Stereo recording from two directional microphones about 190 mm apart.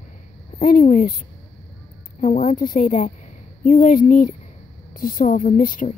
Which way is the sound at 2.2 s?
40° left (ahead or behind).